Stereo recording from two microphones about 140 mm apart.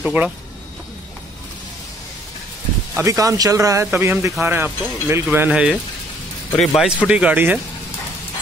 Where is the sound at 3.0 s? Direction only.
25° right (ahead or behind); by 5.8 s 5° right (ahead or behind).